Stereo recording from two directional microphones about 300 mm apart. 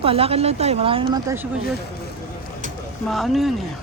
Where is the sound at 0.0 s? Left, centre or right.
Centre.